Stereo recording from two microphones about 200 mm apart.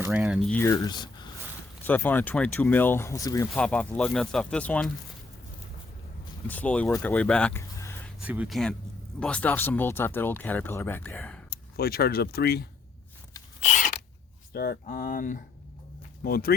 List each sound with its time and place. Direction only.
0.0 s speech: 10° right (ahead or behind)
0.4 s speech: 10° left (ahead or behind)
1.8 s speech: 10° left (ahead or behind)
3.5 s speech: 5° left (ahead or behind)
6.5 s speech: 5° left (ahead or behind)
8.2 s speech: 5° right (ahead or behind)
11.5 s speech: 50° left (ahead or behind)
13.6 s a sound: 40° left (ahead or behind)
14.5 s speech: 50° left (ahead or behind)